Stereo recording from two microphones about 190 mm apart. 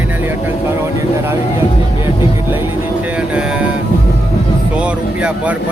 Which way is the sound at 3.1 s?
5° right (ahead or behind).